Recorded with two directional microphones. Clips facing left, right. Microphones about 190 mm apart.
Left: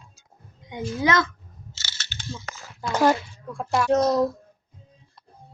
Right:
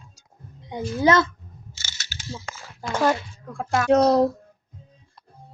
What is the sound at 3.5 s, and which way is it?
Speech, 60° right (ahead or behind).